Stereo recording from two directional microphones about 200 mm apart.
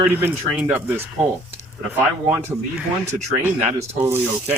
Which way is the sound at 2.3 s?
15° right (ahead or behind).